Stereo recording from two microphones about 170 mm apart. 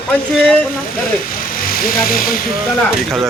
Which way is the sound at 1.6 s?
55° left (ahead or behind).